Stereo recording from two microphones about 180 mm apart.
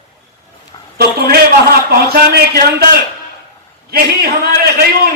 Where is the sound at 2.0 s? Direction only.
60° right (ahead or behind).